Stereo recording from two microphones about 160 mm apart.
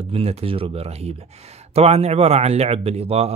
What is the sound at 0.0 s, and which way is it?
Speech, 35° right (ahead or behind).